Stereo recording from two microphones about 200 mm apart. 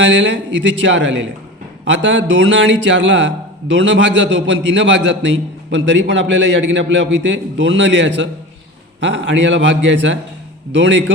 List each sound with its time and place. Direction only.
0.0 s a man's voice: 65° right (ahead or behind)